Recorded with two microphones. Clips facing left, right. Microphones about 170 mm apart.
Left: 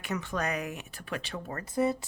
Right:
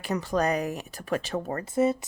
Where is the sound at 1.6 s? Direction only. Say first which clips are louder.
Right 3 dB; 20° right (ahead or behind).